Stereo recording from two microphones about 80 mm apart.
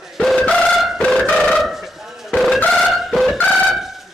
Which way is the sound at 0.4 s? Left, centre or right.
Centre.